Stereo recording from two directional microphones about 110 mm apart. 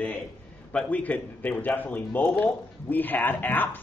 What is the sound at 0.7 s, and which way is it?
Speech, 15° left (ahead or behind).